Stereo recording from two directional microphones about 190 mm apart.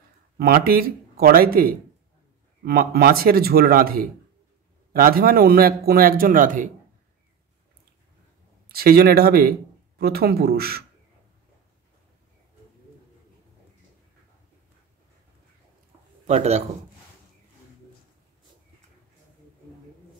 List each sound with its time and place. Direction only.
0.4 s a man's voice: 50° right (ahead or behind)
8.6 s speech: 55° right (ahead or behind)
16.3 s speech: 35° right (ahead or behind)